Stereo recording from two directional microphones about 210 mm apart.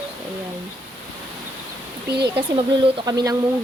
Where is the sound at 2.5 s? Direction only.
25° right (ahead or behind).